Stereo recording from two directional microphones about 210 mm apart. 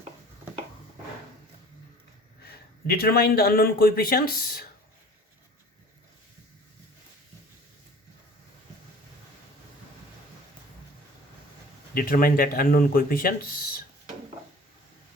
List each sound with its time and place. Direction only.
2.8 s speech: 45° left (ahead or behind)
11.9 s speech: 45° left (ahead or behind)